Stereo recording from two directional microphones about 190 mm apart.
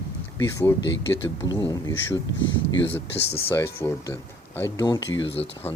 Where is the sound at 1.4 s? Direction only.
25° left (ahead or behind).